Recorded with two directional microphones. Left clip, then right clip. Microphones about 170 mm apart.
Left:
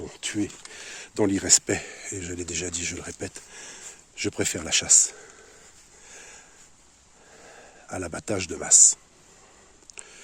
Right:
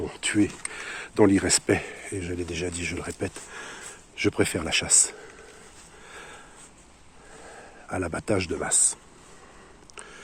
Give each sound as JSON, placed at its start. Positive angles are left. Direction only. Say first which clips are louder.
{"t": 0.0, "sound": "speech", "louder": "right 5 dB", "side_deg": 35}
{"t": 6.1, "sound": "sniff", "louder": "right 3 dB", "side_deg": 40}
{"t": 7.5, "sound": "speech", "louder": "right 3 dB", "side_deg": 40}
{"t": 9.9, "sound": "a sound", "louder": "right 2 dB", "side_deg": 40}